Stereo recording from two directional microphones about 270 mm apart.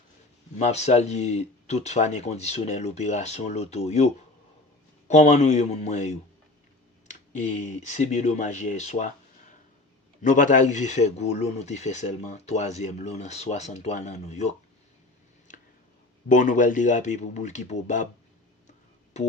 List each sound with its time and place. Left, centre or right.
0.6 s speech: left
7.7 s speech: left
10.2 s speech: left
16.3 s speech: left
19.1 s speech: left